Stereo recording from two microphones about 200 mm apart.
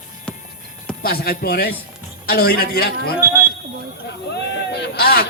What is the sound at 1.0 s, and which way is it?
A man's voice, 50° left (ahead or behind).